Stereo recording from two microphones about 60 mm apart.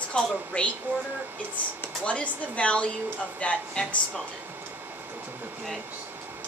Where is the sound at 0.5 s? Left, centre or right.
Left.